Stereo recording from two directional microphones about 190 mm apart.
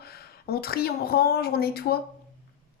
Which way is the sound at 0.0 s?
55° left (ahead or behind).